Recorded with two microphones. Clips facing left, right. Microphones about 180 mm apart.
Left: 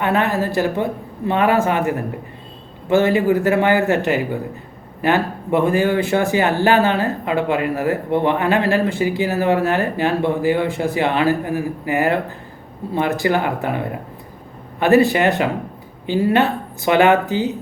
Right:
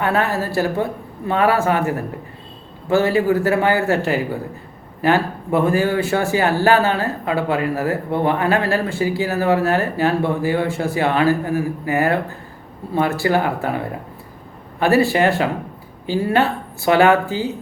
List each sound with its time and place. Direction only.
0.0 s speech: 20° left (ahead or behind)
14.8 s speech: 20° left (ahead or behind)